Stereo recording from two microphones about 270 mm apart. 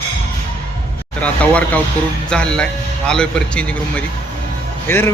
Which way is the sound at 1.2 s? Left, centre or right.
Centre.